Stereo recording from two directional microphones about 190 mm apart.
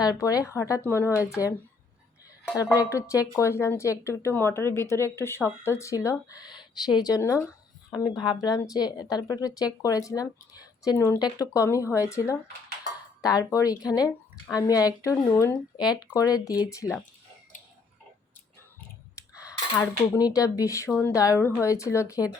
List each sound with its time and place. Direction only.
0.0 s speech: 20° left (ahead or behind)
2.7 s speech: 15° left (ahead or behind)
19.4 s a sound: 15° left (ahead or behind)
20.1 s speech: 20° left (ahead or behind)